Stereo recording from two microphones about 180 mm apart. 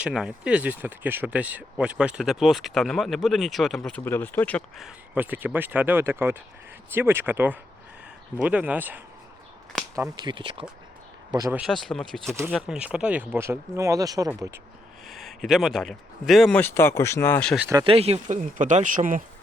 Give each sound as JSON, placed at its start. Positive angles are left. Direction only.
{"t": 0.0, "sound": "speech", "side_deg": -5}
{"t": 4.9, "sound": "speech", "side_deg": -10}
{"t": 9.9, "sound": "speech", "side_deg": -20}
{"t": 11.5, "sound": "speech", "side_deg": 0}
{"t": 15.0, "sound": "speech", "side_deg": 0}
{"t": 17.8, "sound": "speech", "side_deg": -35}